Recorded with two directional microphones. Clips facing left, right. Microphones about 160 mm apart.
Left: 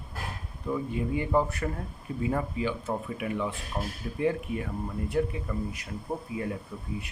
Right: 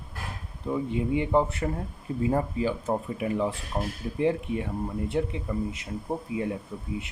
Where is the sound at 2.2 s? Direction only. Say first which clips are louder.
Right 3 dB; 35° right (ahead or behind).